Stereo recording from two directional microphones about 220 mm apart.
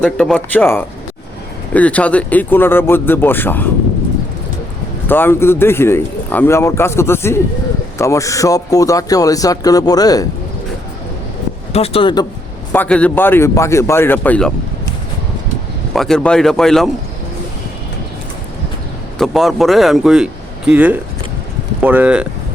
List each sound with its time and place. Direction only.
0.0 s speech: 5° left (ahead or behind)
5.0 s speech: 10° left (ahead or behind)
11.7 s speech: 25° left (ahead or behind)
12.7 s speech: 5° left (ahead or behind)
15.9 s speech: centre (ahead or behind)
19.2 s speech: centre (ahead or behind)